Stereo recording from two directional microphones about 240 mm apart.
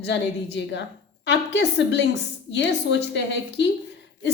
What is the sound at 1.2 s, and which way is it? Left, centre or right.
A woman's voice, left.